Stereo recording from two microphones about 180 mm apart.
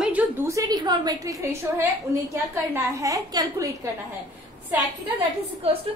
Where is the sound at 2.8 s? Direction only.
15° right (ahead or behind).